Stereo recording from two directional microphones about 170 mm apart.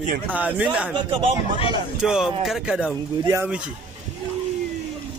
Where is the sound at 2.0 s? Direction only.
5° right (ahead or behind).